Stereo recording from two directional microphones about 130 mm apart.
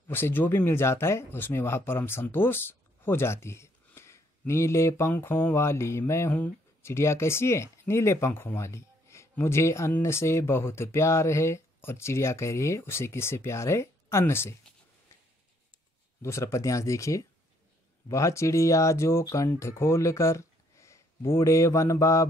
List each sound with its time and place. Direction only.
0.1 s speech: 15° left (ahead or behind)
16.2 s speech: 20° left (ahead or behind)